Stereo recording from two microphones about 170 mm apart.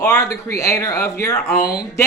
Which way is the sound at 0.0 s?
15° left (ahead or behind).